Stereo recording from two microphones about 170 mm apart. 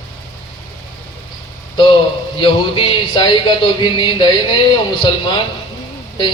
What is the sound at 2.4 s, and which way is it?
A man's voice, 30° left (ahead or behind).